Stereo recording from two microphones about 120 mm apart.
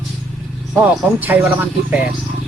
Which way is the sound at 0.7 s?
15° right (ahead or behind).